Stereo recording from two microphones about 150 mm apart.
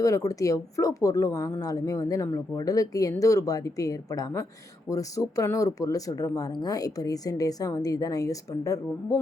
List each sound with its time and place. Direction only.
0.0 s speech: 20° left (ahead or behind)